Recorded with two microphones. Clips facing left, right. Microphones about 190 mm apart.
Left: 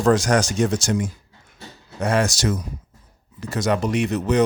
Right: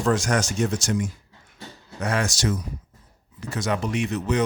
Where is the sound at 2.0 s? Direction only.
35° left (ahead or behind).